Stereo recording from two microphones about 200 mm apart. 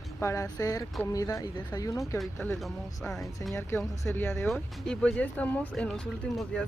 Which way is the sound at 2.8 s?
15° left (ahead or behind).